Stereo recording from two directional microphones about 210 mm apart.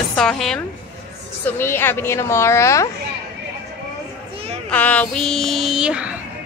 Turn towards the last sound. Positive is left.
turn(degrees=-5)  # may be behind; listen again after turning